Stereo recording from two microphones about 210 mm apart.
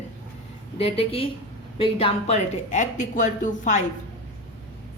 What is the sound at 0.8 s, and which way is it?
A woman's voice, 25° left (ahead or behind).